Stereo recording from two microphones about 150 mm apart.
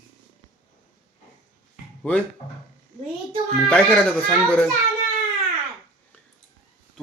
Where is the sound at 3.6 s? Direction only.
5° left (ahead or behind).